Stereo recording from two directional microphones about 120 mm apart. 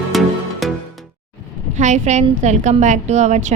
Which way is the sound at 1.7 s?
85° right.